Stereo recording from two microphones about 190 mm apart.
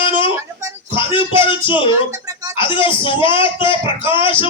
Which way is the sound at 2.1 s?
20° right (ahead or behind).